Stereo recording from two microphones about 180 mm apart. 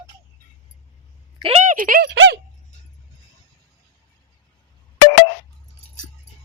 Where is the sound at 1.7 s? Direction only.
50° right (ahead or behind).